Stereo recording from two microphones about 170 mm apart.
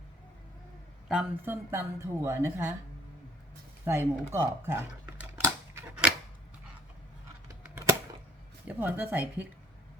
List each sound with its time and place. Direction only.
1.0 s speech: 5° right (ahead or behind)
1.5 s a woman's voice: 15° right (ahead or behind)
3.8 s a sound: 15° right (ahead or behind)
7.4 s typewriter: 20° right (ahead or behind)
8.6 s a woman's voice: 10° right (ahead or behind)